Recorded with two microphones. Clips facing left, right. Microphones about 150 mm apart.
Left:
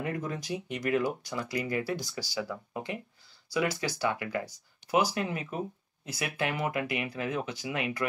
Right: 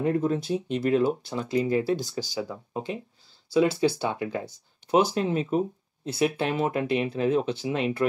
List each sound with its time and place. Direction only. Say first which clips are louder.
0.1 s speech: right 9 dB; 25° right (ahead or behind)